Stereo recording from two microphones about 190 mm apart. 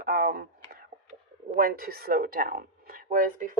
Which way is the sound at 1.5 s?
50° right (ahead or behind).